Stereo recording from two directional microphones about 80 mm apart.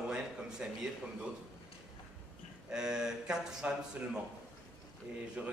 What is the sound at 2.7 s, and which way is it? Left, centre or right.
A man's voice, centre.